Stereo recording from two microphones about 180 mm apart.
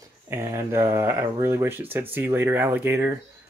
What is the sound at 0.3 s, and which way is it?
Speech, 15° right (ahead or behind).